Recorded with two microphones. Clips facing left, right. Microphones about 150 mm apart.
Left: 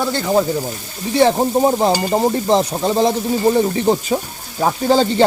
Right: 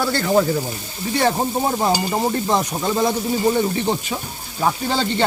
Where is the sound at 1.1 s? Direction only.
30° left (ahead or behind).